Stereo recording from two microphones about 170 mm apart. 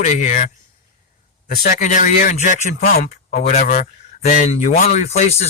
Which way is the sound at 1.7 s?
50° left (ahead or behind).